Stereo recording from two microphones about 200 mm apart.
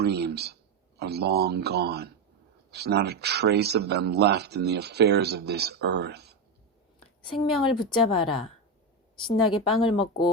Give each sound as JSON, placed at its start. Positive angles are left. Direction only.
{"t": 0.0, "sound": "speech", "side_deg": -55}
{"t": 7.3, "sound": "a woman's voice", "side_deg": 25}
{"t": 9.8, "sound": "a woman's voice", "side_deg": 25}